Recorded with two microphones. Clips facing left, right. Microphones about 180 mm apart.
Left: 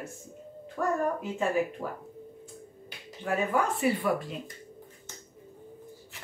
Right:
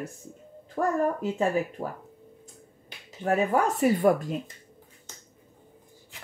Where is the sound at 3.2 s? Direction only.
40° right (ahead or behind).